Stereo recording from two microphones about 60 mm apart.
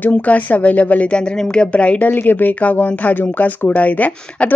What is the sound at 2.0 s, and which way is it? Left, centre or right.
A woman's voice, left.